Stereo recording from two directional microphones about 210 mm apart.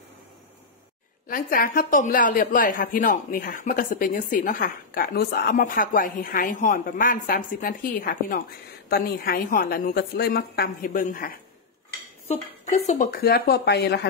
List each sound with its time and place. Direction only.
1.2 s a woman's voice: 40° left (ahead or behind)
12.3 s a woman's voice: 30° left (ahead or behind); by 14.0 s 50° left (ahead or behind)